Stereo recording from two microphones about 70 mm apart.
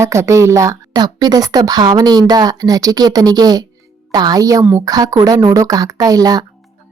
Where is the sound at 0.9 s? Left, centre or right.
Right.